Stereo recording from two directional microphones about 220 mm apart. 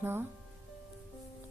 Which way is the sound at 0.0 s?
10° right (ahead or behind).